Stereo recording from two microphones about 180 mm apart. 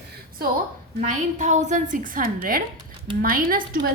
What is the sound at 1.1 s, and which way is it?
A woman's voice, 40° right (ahead or behind).